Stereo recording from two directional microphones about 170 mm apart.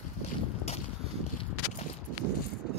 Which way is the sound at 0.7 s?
40° left (ahead or behind).